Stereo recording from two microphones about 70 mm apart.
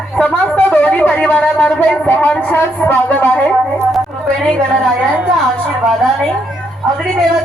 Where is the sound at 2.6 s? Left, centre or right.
Left.